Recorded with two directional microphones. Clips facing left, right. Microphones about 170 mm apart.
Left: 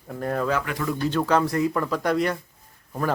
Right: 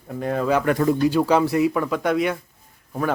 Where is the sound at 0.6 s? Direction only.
50° right (ahead or behind).